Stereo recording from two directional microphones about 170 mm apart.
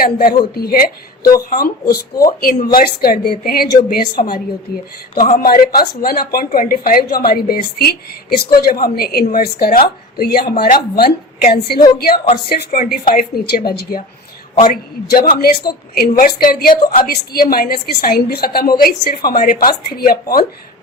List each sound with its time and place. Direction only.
0.0 s speech: 65° left (ahead or behind)
15.1 s speech: 60° left (ahead or behind)